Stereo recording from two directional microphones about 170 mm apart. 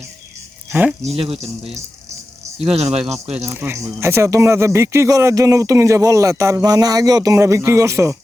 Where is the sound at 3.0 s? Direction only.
40° right (ahead or behind).